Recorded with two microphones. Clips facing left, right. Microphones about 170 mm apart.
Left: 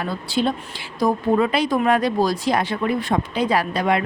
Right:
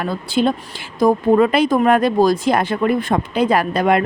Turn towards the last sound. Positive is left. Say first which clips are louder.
# right 4 dB
turn(degrees=-50)  # may be behind; listen again after turning